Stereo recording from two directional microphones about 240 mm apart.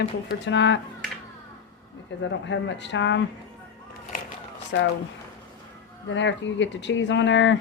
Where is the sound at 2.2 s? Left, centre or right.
Left.